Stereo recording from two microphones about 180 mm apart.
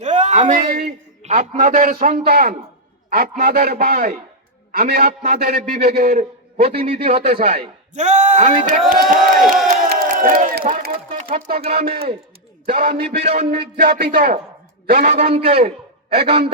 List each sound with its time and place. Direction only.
0.0 s a sound: 40° right (ahead or behind)
1.2 s a man's voice: 40° right (ahead or behind); by 6.1 s 55° right (ahead or behind)
6.1 s a man's voice: 35° right (ahead or behind)
7.9 s a man's voice: 40° right (ahead or behind)
9.8 s crowd: 50° right (ahead or behind)
11.7 s a man's voice: 55° right (ahead or behind)
15.0 s a man's voice: 30° right (ahead or behind)